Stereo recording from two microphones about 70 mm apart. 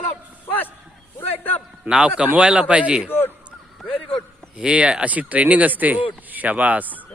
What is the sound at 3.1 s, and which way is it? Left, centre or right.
Speech, left.